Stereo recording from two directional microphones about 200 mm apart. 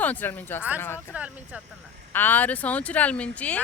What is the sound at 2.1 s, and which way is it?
Speech, 10° left (ahead or behind).